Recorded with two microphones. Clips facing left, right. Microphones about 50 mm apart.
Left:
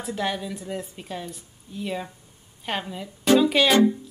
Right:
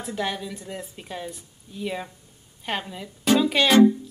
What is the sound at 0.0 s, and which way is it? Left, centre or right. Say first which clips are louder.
A woman's voice: left 1 dB; centre.